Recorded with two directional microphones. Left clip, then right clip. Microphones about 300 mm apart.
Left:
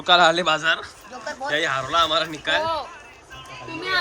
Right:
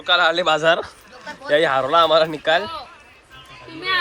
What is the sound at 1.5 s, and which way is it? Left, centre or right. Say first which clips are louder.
Speech: right 6 dB; centre.